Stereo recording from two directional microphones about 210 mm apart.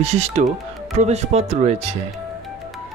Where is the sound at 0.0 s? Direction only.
30° right (ahead or behind).